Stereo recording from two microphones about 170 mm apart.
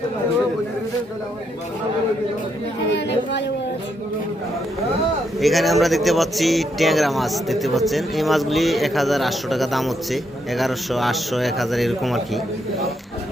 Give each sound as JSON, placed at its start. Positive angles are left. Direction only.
{"t": 2.9, "sound": "speech", "side_deg": 90}
{"t": 5.4, "sound": "speech", "side_deg": 0}